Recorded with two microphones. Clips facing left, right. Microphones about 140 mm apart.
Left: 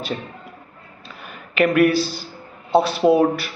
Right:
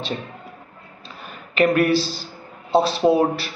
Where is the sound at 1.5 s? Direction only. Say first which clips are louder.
Left 1 dB; 35° right (ahead or behind).